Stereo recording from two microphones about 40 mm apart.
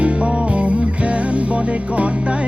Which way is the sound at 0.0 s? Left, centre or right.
Right.